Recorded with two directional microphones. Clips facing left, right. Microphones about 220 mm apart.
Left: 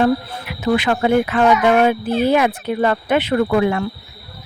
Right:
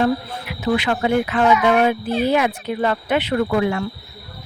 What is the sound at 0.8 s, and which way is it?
Speech, 50° left (ahead or behind).